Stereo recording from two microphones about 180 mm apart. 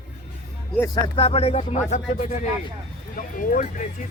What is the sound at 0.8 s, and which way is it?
Speech, 20° left (ahead or behind).